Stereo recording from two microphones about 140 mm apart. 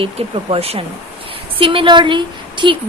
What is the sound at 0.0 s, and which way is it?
A woman's voice, 45° right (ahead or behind).